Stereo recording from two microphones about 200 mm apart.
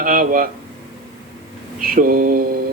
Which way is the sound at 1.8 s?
45° right (ahead or behind).